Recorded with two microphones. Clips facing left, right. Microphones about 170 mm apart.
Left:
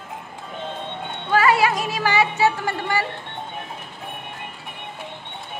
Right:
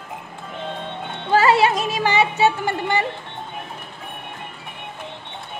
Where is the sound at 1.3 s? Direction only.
25° right (ahead or behind).